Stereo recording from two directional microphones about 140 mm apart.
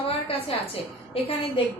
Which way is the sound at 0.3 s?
45° left (ahead or behind).